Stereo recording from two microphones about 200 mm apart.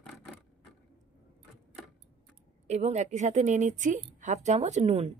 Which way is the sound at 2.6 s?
35° right (ahead or behind).